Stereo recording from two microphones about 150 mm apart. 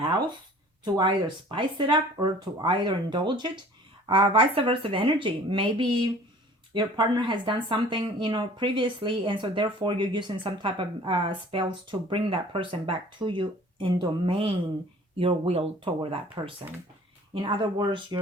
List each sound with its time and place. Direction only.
0.9 s speech: 35° right (ahead or behind)
17.3 s speech: 35° right (ahead or behind)